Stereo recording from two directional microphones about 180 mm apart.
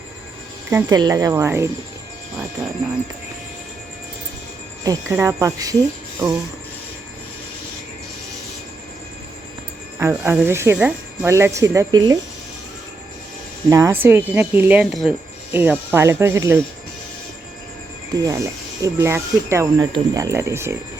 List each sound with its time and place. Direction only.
0.7 s speech: 15° right (ahead or behind)
4.8 s speech: 20° right (ahead or behind)
10.0 s speech: 15° right (ahead or behind)
13.7 s speech: 15° right (ahead or behind)
18.1 s speech: 20° right (ahead or behind)